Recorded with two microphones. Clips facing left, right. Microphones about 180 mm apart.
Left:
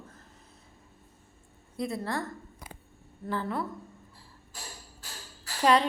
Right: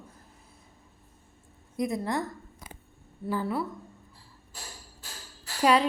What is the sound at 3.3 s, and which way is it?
Speech, 10° right (ahead or behind).